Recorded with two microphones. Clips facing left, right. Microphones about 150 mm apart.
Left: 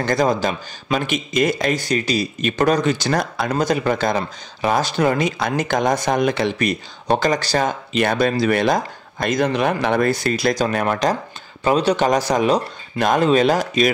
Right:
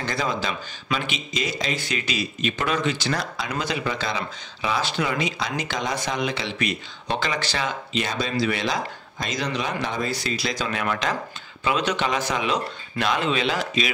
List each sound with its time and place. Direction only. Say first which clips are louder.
0.0 s speech: left 8 dB; 45° left (ahead or behind)
1.8 s speech: left 8 dB; 40° left (ahead or behind)